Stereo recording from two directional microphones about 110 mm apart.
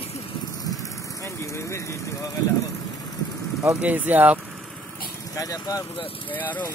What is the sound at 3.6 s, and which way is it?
Speech, 15° right (ahead or behind).